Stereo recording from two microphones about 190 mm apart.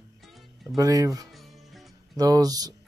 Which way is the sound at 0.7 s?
20° right (ahead or behind).